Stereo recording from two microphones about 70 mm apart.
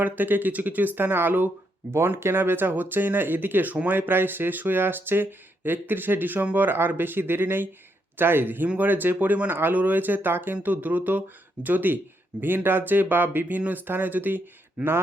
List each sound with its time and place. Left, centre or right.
0.0 s speech: right